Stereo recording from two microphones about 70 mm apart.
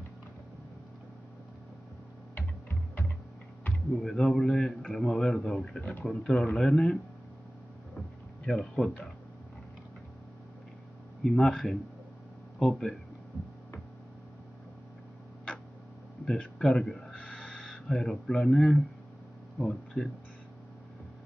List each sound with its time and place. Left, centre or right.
2.3 s music: left
3.9 s a man's voice: centre
8.5 s a man's voice: centre
11.2 s speech: centre
16.5 s speech: centre